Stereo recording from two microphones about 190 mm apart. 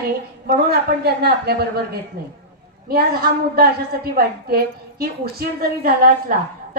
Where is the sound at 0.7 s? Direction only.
55° right (ahead or behind).